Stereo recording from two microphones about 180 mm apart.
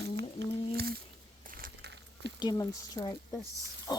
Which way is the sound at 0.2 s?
65° right (ahead or behind).